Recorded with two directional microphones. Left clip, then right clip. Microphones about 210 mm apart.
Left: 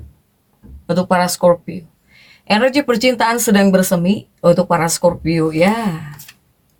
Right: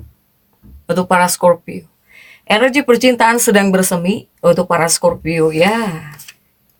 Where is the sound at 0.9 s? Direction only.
35° right (ahead or behind).